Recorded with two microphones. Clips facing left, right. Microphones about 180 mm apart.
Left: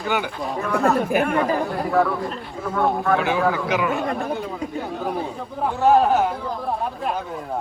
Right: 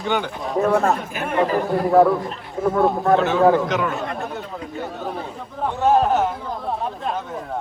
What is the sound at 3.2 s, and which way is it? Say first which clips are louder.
Speech: right 5 dB; 10° left (ahead or behind).